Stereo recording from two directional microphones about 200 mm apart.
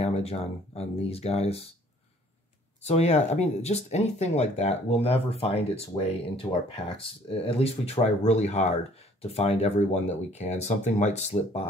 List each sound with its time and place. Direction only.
0.0 s speech: 30° left (ahead or behind)
2.8 s speech: 30° left (ahead or behind)